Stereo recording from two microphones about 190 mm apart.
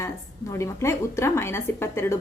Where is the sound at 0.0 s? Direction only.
15° left (ahead or behind).